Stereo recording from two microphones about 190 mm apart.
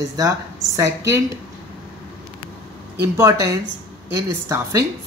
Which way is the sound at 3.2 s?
15° right (ahead or behind).